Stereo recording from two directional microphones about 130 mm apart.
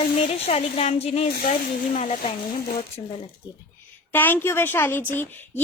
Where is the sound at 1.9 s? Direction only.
65° left (ahead or behind).